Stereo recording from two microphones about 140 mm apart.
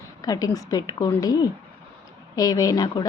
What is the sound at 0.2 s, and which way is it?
A woman's voice, 25° left (ahead or behind).